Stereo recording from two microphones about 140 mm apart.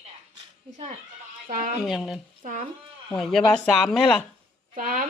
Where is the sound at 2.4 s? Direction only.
65° right (ahead or behind).